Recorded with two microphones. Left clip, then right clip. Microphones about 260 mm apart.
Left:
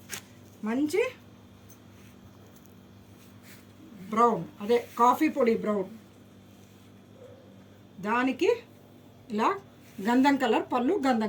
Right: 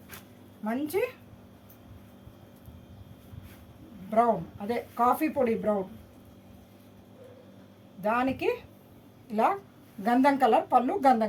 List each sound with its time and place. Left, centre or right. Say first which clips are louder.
0.1 s zipper: left 7 dB; left
0.6 s a woman's voice: left 3 dB; centre
4.1 s speech: even; centre
8.0 s speech: left 1 dB; right